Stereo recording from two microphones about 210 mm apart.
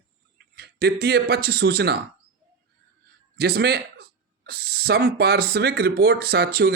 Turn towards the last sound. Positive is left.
turn(degrees=-50)  # may be behind; listen again after turning